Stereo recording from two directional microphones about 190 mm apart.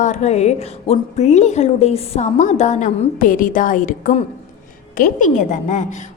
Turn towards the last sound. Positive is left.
turn(degrees=40)  # may be behind; listen again after turning